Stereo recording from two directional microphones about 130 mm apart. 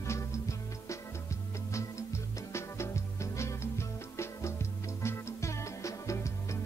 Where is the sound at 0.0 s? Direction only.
25° left (ahead or behind).